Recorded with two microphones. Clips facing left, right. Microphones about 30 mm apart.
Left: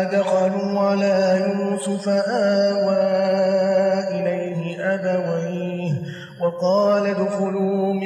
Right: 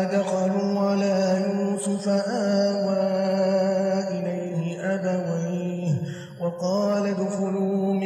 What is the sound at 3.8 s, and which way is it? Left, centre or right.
Mantra, left.